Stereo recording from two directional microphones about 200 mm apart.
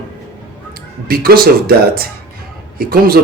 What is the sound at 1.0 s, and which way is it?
Speech, 50° right (ahead or behind).